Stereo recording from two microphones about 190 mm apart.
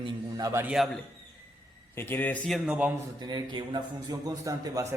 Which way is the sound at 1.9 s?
10° left (ahead or behind).